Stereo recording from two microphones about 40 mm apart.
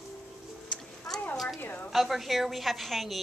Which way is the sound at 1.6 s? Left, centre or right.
Left.